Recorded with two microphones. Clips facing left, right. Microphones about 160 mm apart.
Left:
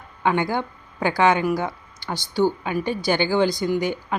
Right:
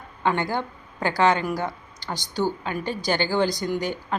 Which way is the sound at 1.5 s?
15° left (ahead or behind).